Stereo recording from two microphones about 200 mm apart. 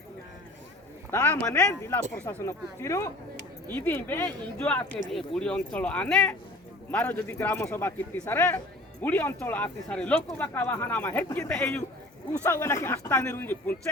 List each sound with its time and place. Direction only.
1.1 s a man's voice: 10° left (ahead or behind)